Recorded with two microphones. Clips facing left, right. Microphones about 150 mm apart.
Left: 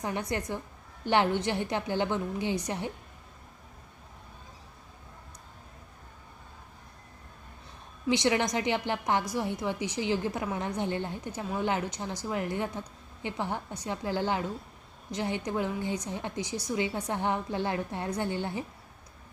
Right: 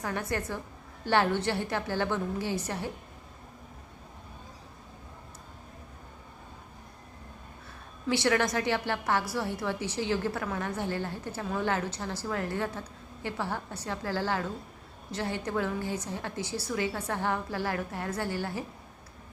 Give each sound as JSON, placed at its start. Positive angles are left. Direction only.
{"t": 0.0, "sound": "a woman's voice", "side_deg": 20}
{"t": 8.0, "sound": "a woman's voice", "side_deg": 15}